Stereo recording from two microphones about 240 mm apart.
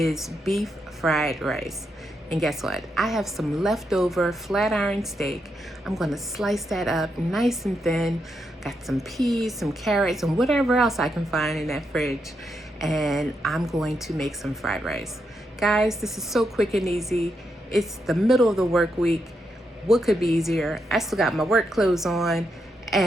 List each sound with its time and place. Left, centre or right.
0.0 s a woman's voice: centre